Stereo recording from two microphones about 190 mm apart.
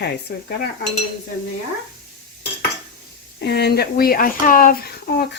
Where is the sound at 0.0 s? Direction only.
60° left (ahead or behind).